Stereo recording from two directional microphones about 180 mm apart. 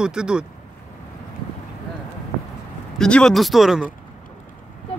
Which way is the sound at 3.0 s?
5° left (ahead or behind).